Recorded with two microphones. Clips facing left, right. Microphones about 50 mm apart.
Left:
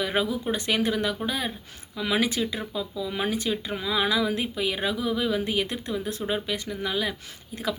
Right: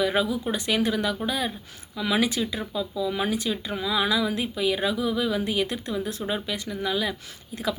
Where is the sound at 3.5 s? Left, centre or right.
Left.